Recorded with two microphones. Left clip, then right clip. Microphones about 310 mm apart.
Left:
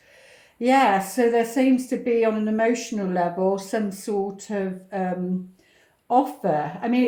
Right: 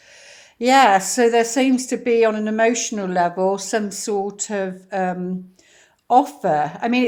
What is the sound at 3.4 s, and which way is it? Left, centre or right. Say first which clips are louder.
A woman's voice: right 3 dB; right.